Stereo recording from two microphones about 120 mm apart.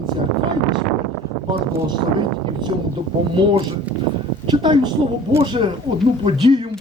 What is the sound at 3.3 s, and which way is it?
Speech, 45° right (ahead or behind).